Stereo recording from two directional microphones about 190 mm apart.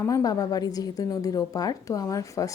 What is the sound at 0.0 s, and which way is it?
A woman's voice, 20° left (ahead or behind).